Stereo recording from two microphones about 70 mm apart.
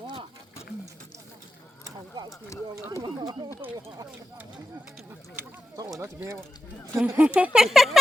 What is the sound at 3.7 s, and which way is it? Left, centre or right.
Speech, right.